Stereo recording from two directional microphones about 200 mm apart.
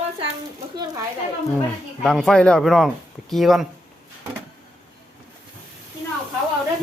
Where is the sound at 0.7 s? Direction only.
20° right (ahead or behind).